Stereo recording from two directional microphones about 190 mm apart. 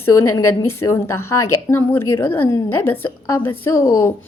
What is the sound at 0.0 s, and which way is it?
A woman's voice, 15° left (ahead or behind).